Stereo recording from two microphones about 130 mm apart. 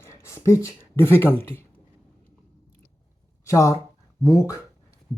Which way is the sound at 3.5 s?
25° left (ahead or behind).